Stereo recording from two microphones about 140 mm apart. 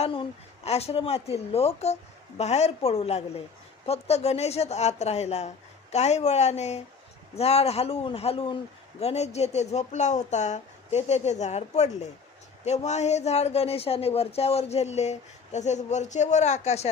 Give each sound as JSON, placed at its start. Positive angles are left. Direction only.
{"t": 0.0, "sound": "speech", "side_deg": 45}